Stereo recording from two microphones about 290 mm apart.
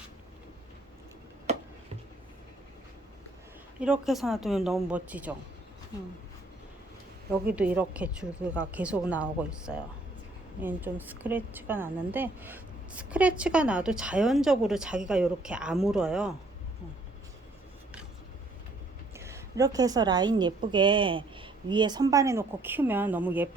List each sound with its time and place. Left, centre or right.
1.5 s a sound: right
3.8 s a woman's voice: centre
7.5 s a woman's voice: centre
19.1 s a woman's voice: centre